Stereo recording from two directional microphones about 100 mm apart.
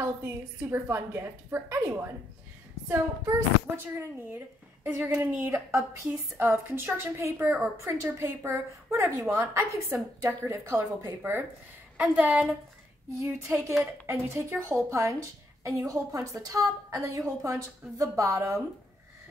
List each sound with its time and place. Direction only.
0.0 s a woman's voice: 25° right (ahead or behind)
3.7 s a woman's voice: 25° right (ahead or behind)
7.8 s a woman's voice: 30° right (ahead or behind)
12.0 s a woman's voice: 15° right (ahead or behind)
13.2 s a woman's voice: 30° right (ahead or behind)